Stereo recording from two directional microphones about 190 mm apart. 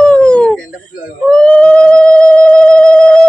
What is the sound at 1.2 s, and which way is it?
Theremin, 5° left (ahead or behind).